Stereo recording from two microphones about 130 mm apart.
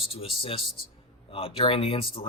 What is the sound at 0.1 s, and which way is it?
Speech, 45° left (ahead or behind).